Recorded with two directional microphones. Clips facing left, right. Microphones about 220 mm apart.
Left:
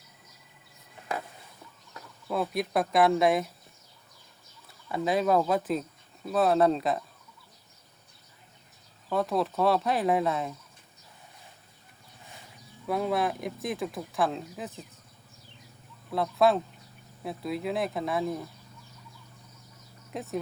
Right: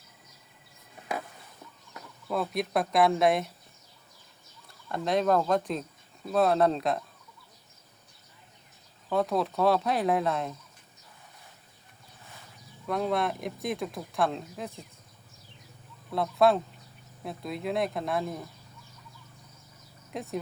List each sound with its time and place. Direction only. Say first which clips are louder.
2.2 s speech: left 1 dB; centre (ahead or behind)
4.9 s speech: even; 5° left (ahead or behind)
9.0 s speech: even; centre (ahead or behind)
12.8 s speech: left 1 dB; 5° left (ahead or behind)
16.0 s speech: even; centre (ahead or behind)
20.1 s speech: left 1 dB; centre (ahead or behind)